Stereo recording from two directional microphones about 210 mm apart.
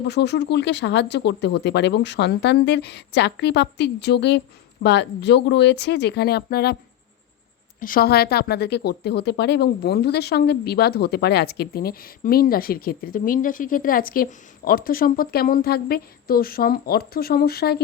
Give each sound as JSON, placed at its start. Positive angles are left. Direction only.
{"t": 0.1, "sound": "speech", "side_deg": 55}
{"t": 7.8, "sound": "speech", "side_deg": 45}